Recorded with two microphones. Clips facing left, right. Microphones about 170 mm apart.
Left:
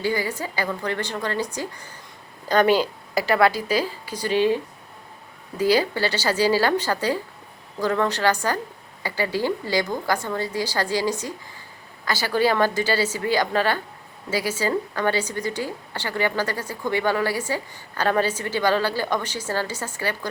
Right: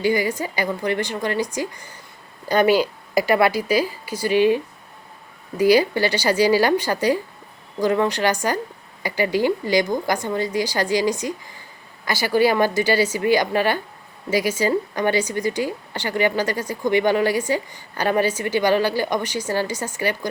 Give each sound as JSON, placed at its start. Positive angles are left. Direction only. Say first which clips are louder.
{"t": 0.0, "sound": "a woman's voice", "louder": "right 4 dB", "side_deg": -15}